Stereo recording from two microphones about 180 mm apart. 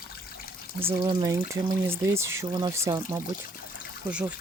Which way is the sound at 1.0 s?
20° right (ahead or behind).